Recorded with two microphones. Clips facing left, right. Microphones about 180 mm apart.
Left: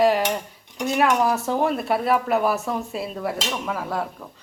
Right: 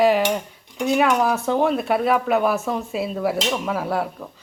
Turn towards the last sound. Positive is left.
turn(degrees=-10)  # may be behind; listen again after turning